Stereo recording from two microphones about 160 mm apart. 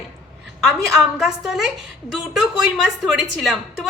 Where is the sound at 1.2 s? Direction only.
Centre (ahead or behind).